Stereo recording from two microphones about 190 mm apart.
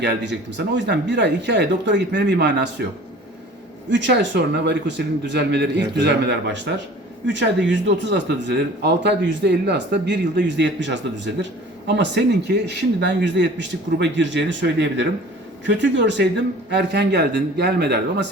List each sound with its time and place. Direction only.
0.0 s speech: 65° right (ahead or behind)
3.8 s speech: 70° right (ahead or behind)